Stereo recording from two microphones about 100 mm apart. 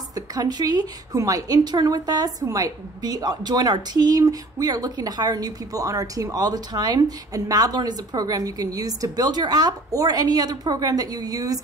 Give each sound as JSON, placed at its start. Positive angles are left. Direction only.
{"t": 0.1, "sound": "a woman's voice", "side_deg": -40}